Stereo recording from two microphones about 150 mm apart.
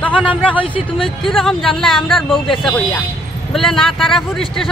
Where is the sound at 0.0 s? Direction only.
10° left (ahead or behind).